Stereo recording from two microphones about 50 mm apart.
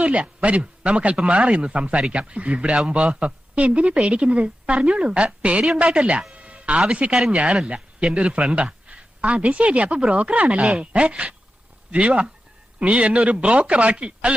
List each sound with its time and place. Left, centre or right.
0.0 s a man's voice: right
6.3 s a sound: right
6.9 s speech: centre